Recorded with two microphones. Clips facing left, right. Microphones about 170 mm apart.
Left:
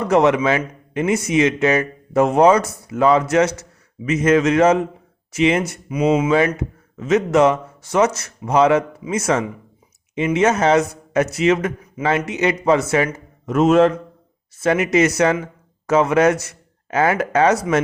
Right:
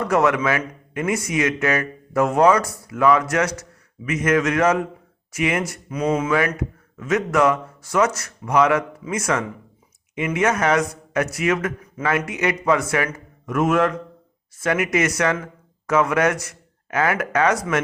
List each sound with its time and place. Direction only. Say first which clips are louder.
0.0 s speech: left 4 dB; 20° left (ahead or behind)
5.9 s speech: left 5 dB; 10° left (ahead or behind)
6.6 s speech: left 1 dB; 20° left (ahead or behind)